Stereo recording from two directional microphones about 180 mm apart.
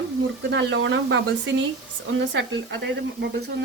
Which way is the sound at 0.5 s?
90° right.